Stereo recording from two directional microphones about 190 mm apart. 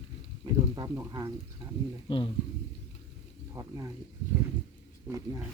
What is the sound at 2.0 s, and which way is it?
Speech, 25° left (ahead or behind).